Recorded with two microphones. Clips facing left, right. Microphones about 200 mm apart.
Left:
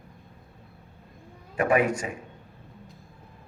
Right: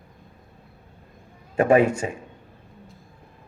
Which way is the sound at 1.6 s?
25° right (ahead or behind).